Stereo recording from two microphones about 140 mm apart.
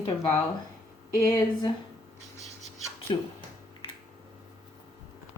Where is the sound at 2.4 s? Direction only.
50° right (ahead or behind).